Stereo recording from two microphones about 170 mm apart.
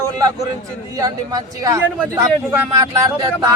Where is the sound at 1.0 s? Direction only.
20° right (ahead or behind).